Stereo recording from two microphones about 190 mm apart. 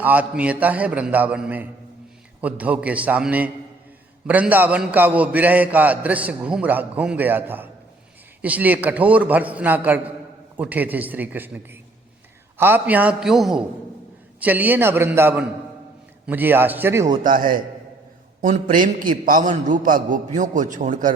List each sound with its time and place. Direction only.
0.0 s a man's voice: 10° right (ahead or behind)
17.2 s a man's voice: 45° right (ahead or behind)